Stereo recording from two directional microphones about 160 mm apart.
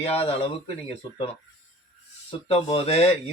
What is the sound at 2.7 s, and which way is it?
Speech, 35° left (ahead or behind).